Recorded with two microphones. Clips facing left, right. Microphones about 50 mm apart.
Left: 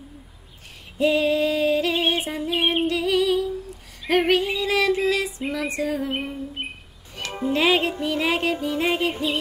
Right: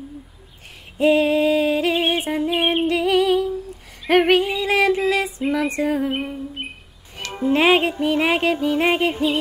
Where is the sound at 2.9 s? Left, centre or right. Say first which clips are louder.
Right 3 dB; right.